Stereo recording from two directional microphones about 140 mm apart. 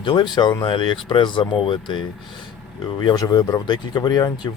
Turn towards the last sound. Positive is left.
turn(degrees=30)  # may be behind; listen again after turning